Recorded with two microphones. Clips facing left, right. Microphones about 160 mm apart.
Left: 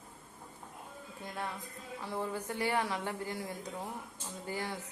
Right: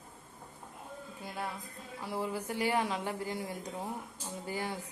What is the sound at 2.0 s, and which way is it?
Speech, 10° right (ahead or behind).